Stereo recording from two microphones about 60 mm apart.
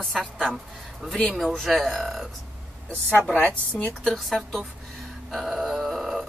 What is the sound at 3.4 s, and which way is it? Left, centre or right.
Speech, left.